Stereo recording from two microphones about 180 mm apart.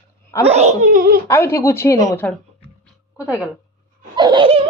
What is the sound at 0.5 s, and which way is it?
Speech, 40° right (ahead or behind).